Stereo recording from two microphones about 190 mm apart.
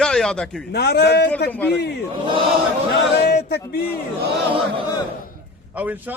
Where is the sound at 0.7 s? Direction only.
60° left (ahead or behind).